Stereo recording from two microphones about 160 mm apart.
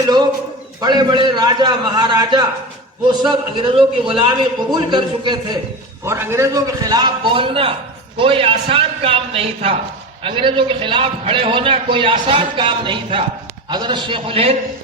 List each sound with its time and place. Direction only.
0.8 s a man's voice: 25° right (ahead or behind)
6.1 s a man's voice: 15° right (ahead or behind); by 14.5 s 35° right (ahead or behind)